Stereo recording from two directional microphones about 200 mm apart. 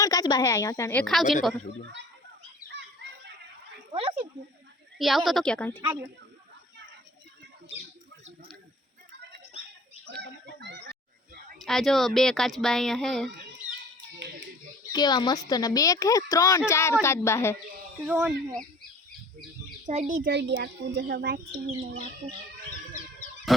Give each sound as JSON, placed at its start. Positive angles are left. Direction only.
{"t": 0.0, "sound": "a woman's voice", "side_deg": 20}
{"t": 1.0, "sound": "speech", "side_deg": 0}
{"t": 3.9, "sound": "snake", "side_deg": -25}
{"t": 4.9, "sound": "speech", "side_deg": 0}
{"t": 10.2, "sound": "a sound", "side_deg": -60}
{"t": 11.6, "sound": "speech", "side_deg": 0}
{"t": 14.9, "sound": "a woman's voice", "side_deg": 20}
{"t": 18.0, "sound": "speech", "side_deg": -10}
{"t": 19.8, "sound": "a child's voice", "side_deg": -35}
{"t": 20.3, "sound": "a child's voice", "side_deg": -55}
{"t": 23.5, "sound": "speech", "side_deg": 0}